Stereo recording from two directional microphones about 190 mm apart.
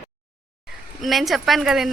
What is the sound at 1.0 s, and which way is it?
Speech, centre (ahead or behind).